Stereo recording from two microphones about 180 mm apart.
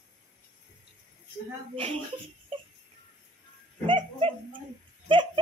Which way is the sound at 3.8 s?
30° right (ahead or behind).